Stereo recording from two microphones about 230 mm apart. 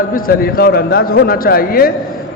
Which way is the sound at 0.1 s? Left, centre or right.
Left.